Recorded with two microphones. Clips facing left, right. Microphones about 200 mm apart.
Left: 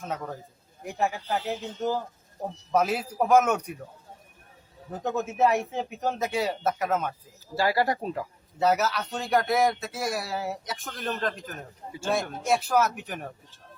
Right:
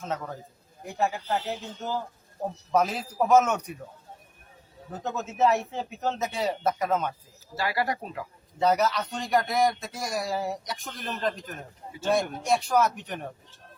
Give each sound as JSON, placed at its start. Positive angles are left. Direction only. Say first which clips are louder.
{"t": 0.9, "sound": "a man's voice", "louder": "right 1 dB", "side_deg": 15}
{"t": 4.9, "sound": "a man's voice", "louder": "left 4 dB", "side_deg": 15}
{"t": 7.5, "sound": "speech", "louder": "left 4 dB", "side_deg": 30}
{"t": 8.5, "sound": "speech", "louder": "right 1 dB", "side_deg": 5}